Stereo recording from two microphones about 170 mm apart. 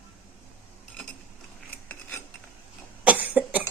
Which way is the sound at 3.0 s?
10° right (ahead or behind).